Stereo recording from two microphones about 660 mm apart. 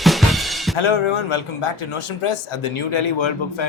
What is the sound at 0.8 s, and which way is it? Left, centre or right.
Speech, left.